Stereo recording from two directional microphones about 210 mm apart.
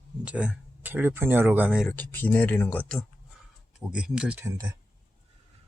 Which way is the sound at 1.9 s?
10° left (ahead or behind).